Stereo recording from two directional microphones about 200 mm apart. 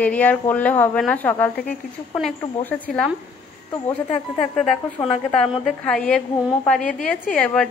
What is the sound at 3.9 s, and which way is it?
Speech, 30° left (ahead or behind).